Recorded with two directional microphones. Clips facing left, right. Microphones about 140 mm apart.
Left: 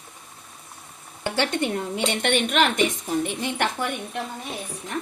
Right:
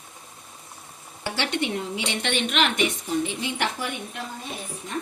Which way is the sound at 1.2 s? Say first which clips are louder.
Left 3 dB; 50° left (ahead or behind).